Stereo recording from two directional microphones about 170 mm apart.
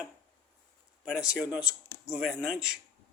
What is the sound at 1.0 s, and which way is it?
Speech, 5° right (ahead or behind).